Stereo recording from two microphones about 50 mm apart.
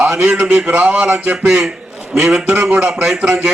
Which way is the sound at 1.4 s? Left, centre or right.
Centre.